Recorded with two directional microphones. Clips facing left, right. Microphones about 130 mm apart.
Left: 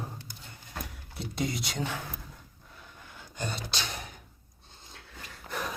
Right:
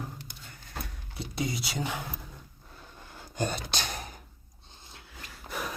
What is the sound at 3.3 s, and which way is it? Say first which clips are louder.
Speech: right 4 dB; 50° right (ahead or behind).